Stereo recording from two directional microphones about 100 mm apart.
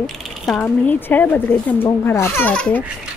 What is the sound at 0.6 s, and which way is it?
Mantra, 15° left (ahead or behind).